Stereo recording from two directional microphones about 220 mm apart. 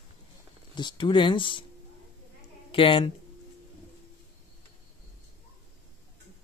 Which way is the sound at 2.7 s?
25° left (ahead or behind).